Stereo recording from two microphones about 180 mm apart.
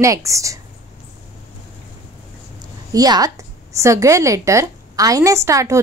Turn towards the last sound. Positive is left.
turn(degrees=-15)  # may be behind; listen again after turning